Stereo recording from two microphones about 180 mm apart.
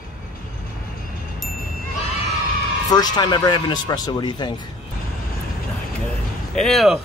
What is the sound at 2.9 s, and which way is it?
Speech, 20° left (ahead or behind).